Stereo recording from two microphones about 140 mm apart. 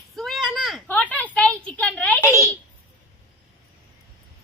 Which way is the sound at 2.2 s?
20° right (ahead or behind).